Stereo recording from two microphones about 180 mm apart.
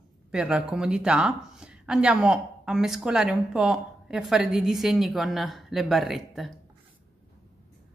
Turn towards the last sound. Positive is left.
turn(degrees=0)  # may be behind; listen again after turning